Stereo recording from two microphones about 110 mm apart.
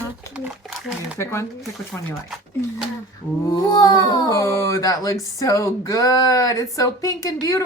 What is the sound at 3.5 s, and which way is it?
Speech, 40° left (ahead or behind).